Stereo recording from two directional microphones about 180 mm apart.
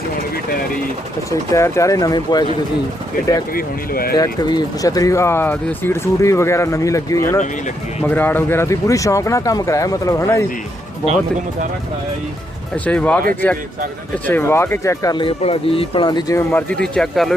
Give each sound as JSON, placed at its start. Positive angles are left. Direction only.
{"t": 1.3, "sound": "speech", "side_deg": 15}
{"t": 3.5, "sound": "speech", "side_deg": 55}
{"t": 4.2, "sound": "speech", "side_deg": 20}
{"t": 12.7, "sound": "speech", "side_deg": 5}
{"t": 14.3, "sound": "speech", "side_deg": 10}
{"t": 16.5, "sound": "speech", "side_deg": 10}